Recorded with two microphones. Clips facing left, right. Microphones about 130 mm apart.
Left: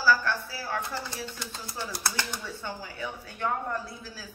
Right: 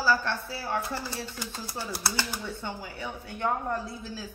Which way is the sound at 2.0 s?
5° right (ahead or behind).